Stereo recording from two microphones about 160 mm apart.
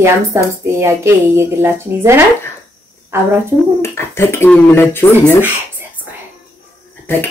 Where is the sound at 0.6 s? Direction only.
15° right (ahead or behind).